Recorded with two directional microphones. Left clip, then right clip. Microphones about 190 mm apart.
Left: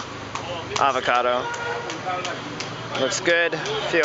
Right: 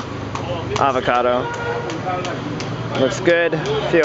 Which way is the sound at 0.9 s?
15° right (ahead or behind).